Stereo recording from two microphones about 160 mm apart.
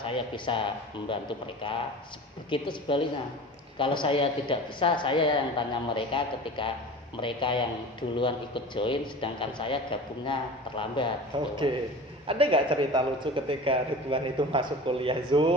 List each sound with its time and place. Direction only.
0.0 s speech: 30° left (ahead or behind)
11.3 s a man's voice: 30° right (ahead or behind)